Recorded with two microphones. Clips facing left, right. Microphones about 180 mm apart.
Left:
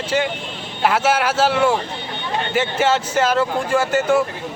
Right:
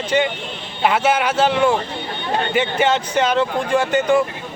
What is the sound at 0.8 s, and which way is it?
Speech, 5° left (ahead or behind).